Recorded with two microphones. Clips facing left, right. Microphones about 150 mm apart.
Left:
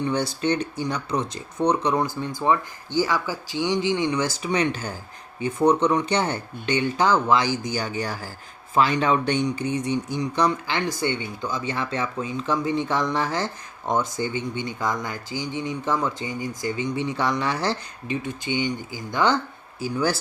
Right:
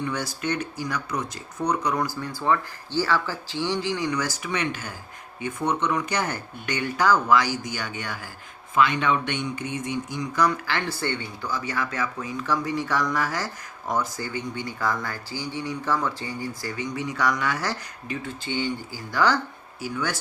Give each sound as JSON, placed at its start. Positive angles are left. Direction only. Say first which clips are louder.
{"t": 0.0, "sound": "speech", "louder": "left 5 dB", "side_deg": 30}
{"t": 19.8, "sound": "speech", "louder": "left 5 dB", "side_deg": 35}